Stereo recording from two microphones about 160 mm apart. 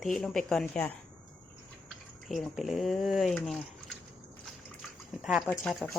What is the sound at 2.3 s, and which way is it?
Speech, centre (ahead or behind).